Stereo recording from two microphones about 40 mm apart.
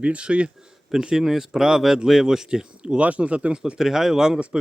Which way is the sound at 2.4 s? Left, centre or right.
Right.